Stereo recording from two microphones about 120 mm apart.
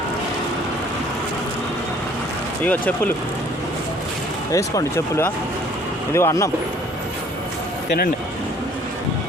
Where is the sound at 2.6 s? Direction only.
15° left (ahead or behind).